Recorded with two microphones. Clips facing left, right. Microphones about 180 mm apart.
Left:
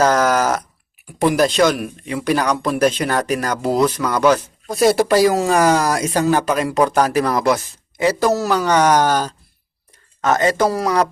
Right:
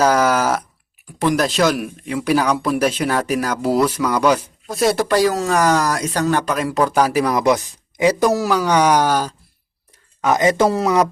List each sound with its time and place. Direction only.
0.0 s speech: 10° right (ahead or behind)
1.2 s speech: 5° left (ahead or behind)
1.5 s speech: 5° right (ahead or behind)
10.6 s speech: 25° right (ahead or behind)